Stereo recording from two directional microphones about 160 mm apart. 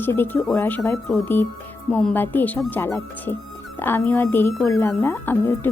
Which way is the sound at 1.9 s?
10° left (ahead or behind).